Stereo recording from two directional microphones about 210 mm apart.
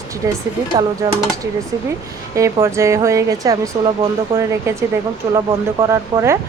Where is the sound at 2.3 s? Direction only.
15° right (ahead or behind).